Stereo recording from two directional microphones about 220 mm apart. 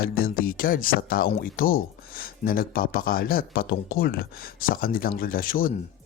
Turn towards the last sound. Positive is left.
turn(degrees=40)  # may be behind; listen again after turning